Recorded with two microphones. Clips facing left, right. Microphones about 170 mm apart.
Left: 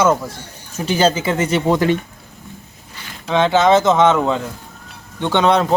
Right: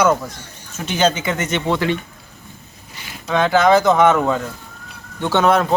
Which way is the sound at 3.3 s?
25° left (ahead or behind).